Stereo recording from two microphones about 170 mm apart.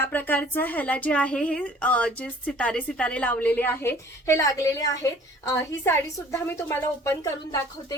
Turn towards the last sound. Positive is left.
turn(degrees=20)  # may be behind; listen again after turning